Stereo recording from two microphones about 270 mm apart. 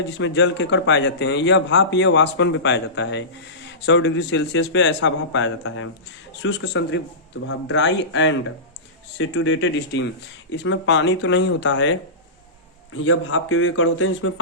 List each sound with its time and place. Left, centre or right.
0.2 s a man's voice: left